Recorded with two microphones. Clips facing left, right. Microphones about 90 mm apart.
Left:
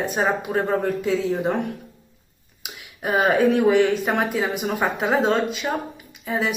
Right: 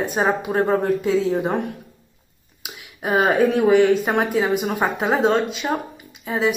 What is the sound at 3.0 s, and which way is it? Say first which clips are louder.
A woman's voice: right 1 dB; 20° right (ahead or behind).